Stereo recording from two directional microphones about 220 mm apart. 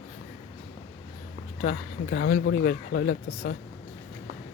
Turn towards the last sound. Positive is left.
turn(degrees=40)  # may be behind; listen again after turning